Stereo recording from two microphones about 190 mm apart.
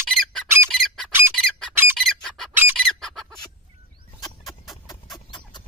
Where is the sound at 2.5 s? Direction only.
10° right (ahead or behind).